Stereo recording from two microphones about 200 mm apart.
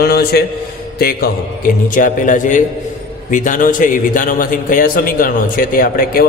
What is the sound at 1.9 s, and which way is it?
A man's voice, 40° left (ahead or behind).